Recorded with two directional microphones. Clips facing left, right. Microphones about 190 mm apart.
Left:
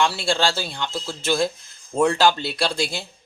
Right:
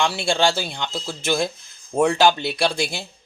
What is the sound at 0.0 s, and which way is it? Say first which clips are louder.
Speech: right 1 dB; 15° right (ahead or behind).